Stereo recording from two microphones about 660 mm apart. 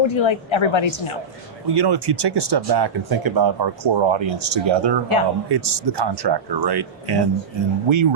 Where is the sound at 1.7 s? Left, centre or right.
Right.